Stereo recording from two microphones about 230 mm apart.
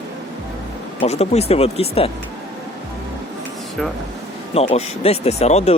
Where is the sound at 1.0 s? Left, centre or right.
Left.